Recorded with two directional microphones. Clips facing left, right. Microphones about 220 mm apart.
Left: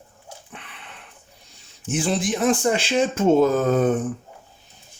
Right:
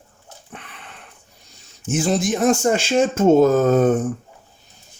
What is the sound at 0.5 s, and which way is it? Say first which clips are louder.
Sniff: right 6 dB; 45° right (ahead or behind).